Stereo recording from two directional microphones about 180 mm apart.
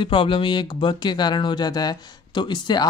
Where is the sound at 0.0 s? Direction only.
30° left (ahead or behind).